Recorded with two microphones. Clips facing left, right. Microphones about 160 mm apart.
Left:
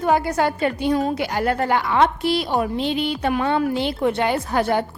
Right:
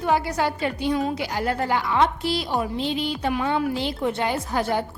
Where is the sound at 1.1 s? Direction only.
60° left (ahead or behind).